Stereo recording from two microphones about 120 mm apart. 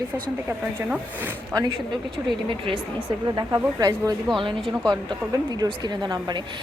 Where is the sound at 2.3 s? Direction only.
45° right (ahead or behind).